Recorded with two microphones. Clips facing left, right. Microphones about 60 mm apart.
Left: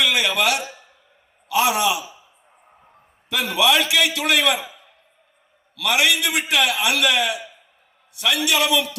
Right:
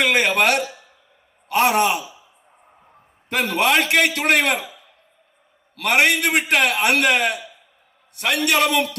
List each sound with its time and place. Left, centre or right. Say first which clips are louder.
0.0 s a sound: right 3 dB; right
1.5 s a man's voice: right 2 dB; right
3.2 s a man's voice: even; right
5.7 s a man's voice: right 2 dB; right